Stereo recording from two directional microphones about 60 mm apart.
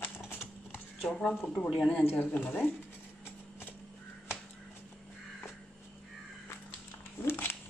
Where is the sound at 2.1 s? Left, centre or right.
Left.